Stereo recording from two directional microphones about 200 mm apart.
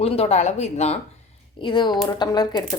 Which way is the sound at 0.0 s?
30° left (ahead or behind).